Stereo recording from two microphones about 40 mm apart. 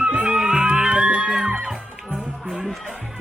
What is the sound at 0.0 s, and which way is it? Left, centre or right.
Music, right.